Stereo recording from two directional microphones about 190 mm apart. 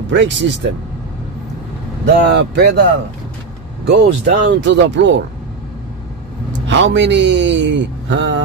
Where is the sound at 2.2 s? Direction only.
65° right (ahead or behind).